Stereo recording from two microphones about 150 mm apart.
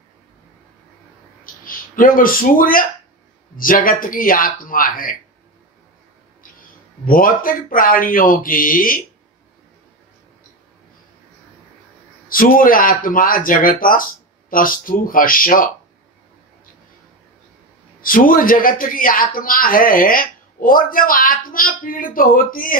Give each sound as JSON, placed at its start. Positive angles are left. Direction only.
{"t": 1.4, "sound": "a man's voice", "side_deg": 70}
{"t": 7.1, "sound": "a man's voice", "side_deg": 70}
{"t": 12.3, "sound": "a man's voice", "side_deg": 70}
{"t": 18.0, "sound": "a man's voice", "side_deg": 70}